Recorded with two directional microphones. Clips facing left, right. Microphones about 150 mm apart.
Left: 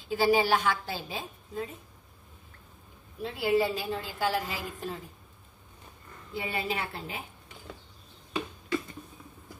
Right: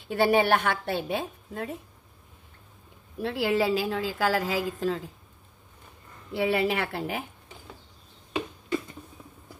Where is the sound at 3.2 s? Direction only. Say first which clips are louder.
Right 2 dB; 90° right.